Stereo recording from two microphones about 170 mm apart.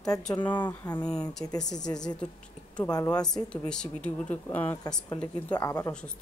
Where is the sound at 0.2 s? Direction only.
5° left (ahead or behind).